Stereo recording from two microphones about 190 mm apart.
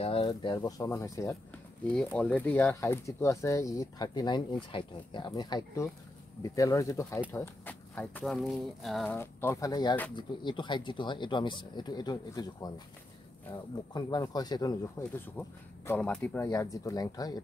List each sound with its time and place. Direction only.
0.0 s a sound: 30° left (ahead or behind)
0.3 s speech: 20° left (ahead or behind); by 9.1 s centre (ahead or behind)
9.1 s speech: 10° left (ahead or behind)